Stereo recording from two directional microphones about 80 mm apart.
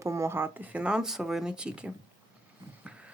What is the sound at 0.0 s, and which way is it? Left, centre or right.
Speech, right.